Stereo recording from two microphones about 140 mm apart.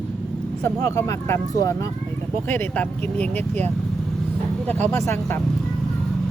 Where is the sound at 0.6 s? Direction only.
20° left (ahead or behind).